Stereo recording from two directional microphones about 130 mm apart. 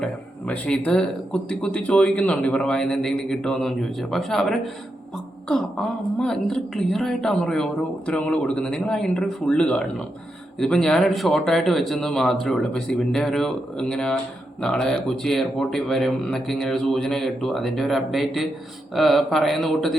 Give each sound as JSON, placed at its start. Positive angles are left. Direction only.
{"t": 0.0, "sound": "speech", "side_deg": 10}
{"t": 6.1, "sound": "speech", "side_deg": 5}